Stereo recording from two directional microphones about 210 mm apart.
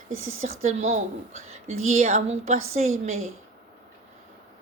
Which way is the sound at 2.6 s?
75° right (ahead or behind).